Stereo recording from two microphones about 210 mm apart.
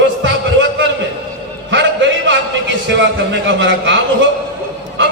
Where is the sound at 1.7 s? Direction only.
65° right (ahead or behind).